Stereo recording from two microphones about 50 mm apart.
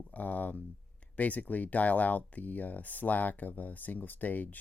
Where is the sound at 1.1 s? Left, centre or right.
Left.